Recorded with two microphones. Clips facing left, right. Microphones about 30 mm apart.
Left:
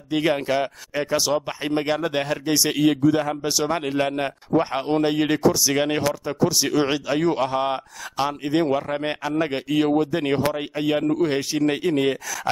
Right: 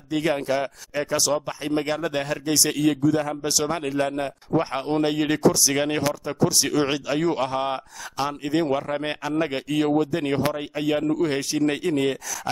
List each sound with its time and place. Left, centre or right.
0.1 s speech: centre
3.4 s speech: centre
3.8 s speech: left
4.5 s a man's voice: centre